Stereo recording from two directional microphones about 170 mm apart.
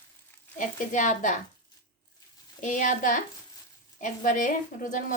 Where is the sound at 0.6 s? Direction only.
50° left (ahead or behind).